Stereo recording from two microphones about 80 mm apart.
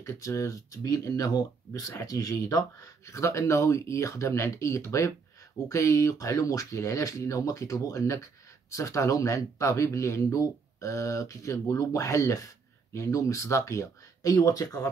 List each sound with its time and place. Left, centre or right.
0.0 s speech: left